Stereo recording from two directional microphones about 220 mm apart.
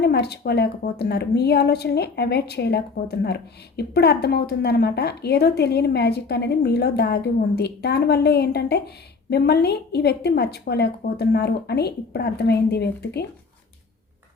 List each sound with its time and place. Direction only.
0.0 s a woman's voice: 50° left (ahead or behind)